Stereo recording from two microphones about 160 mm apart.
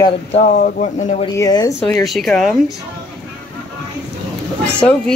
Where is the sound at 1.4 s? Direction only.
20° left (ahead or behind).